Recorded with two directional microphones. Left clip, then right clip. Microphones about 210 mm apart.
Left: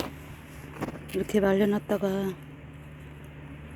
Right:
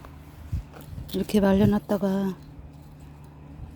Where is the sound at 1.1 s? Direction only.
40° right (ahead or behind).